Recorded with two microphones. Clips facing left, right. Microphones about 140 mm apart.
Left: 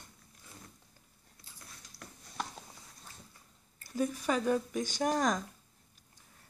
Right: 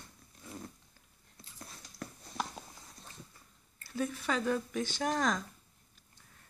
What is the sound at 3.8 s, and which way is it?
Speech, 15° left (ahead or behind).